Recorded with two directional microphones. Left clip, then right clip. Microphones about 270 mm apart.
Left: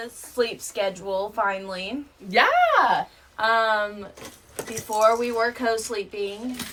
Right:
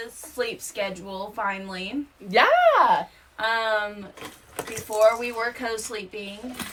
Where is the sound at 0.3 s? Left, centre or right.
Centre.